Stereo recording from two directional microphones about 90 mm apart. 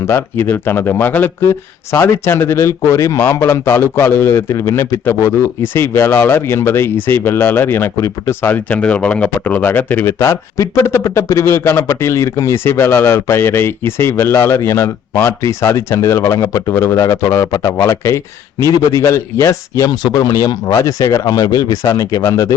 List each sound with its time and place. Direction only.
0.1 s a man's voice: 25° left (ahead or behind)